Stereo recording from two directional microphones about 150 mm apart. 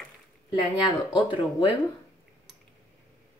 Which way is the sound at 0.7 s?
30° left (ahead or behind).